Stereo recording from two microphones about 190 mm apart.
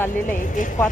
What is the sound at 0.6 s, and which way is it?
Speech, 40° left (ahead or behind).